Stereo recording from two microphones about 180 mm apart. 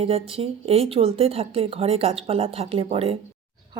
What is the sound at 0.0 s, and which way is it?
Speech, 35° right (ahead or behind).